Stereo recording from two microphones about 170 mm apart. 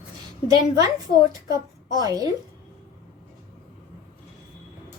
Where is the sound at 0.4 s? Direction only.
20° right (ahead or behind).